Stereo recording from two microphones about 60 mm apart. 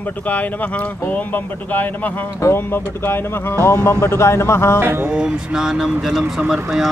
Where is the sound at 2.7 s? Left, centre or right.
Left.